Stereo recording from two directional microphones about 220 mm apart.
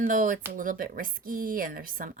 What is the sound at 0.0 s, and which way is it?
Speech, 40° right (ahead or behind).